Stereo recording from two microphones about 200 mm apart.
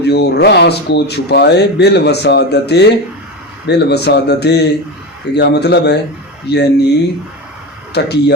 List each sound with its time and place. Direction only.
0.0 s speech: 55° left (ahead or behind)
7.9 s speech: 55° left (ahead or behind)